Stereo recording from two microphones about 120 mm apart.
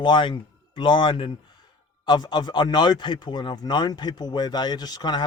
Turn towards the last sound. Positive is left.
turn(degrees=35)  # may be behind; listen again after turning